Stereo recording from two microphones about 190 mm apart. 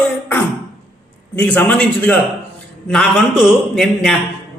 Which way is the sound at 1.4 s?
10° left (ahead or behind).